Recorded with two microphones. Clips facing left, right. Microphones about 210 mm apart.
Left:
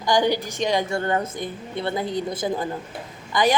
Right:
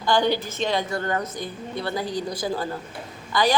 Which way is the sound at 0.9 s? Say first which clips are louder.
Left 3 dB; 25° left (ahead or behind).